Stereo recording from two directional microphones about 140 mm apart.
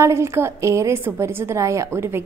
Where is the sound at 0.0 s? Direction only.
20° right (ahead or behind).